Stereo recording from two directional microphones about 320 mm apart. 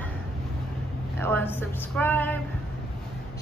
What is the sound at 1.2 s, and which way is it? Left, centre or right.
A woman's voice, centre.